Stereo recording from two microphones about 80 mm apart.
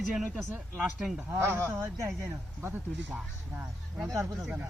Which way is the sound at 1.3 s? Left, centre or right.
Right.